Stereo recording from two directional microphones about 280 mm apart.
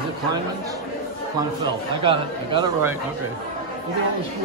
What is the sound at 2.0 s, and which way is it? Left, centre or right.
Speech, centre.